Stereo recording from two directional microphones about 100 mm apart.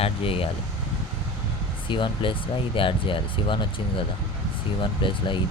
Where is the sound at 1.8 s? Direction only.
55° left (ahead or behind).